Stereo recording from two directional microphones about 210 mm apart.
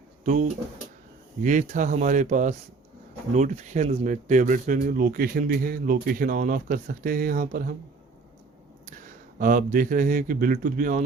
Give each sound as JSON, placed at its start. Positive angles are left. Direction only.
{"t": 1.4, "sound": "speech", "side_deg": -35}
{"t": 8.9, "sound": "speech", "side_deg": -40}